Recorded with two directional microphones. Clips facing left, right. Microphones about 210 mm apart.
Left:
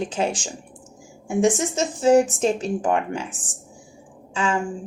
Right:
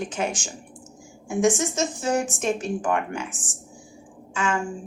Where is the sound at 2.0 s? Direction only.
30° left (ahead or behind).